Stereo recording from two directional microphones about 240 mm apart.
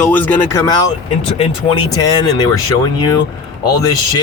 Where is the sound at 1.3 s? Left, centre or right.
Left.